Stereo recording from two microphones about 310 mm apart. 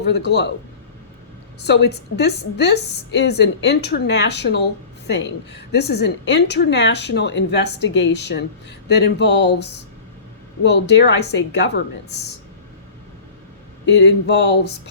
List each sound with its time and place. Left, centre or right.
0.1 s a woman's voice: left
1.6 s a woman's voice: left
13.8 s a woman's voice: left